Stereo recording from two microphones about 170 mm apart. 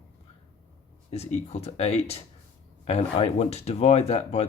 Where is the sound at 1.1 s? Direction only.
40° left (ahead or behind).